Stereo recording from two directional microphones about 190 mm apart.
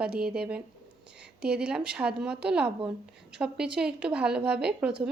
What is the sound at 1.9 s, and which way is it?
A woman's voice, 5° right (ahead or behind).